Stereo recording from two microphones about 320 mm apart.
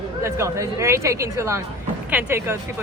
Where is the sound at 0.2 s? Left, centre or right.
Centre.